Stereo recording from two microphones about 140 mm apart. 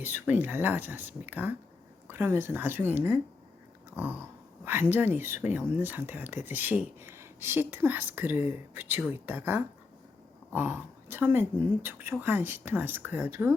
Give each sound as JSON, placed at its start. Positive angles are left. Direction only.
{"t": 0.0, "sound": "speech", "side_deg": -15}